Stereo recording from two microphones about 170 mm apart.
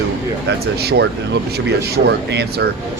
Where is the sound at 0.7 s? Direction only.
70° right (ahead or behind).